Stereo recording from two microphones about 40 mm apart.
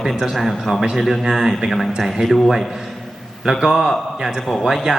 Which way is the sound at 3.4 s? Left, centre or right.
Centre.